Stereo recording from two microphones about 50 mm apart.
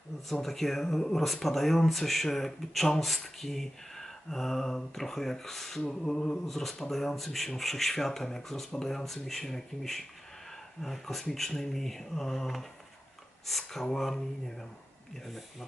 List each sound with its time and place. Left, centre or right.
0.3 s speech: centre